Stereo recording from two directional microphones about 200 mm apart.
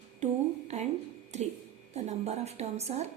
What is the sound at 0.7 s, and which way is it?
A woman's voice, 35° right (ahead or behind).